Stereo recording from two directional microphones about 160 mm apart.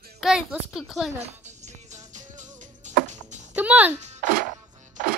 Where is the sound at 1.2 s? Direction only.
45° right (ahead or behind).